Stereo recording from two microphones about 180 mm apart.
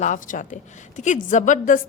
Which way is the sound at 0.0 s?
45° left (ahead or behind).